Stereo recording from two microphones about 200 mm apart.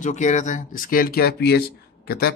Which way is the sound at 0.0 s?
35° left (ahead or behind).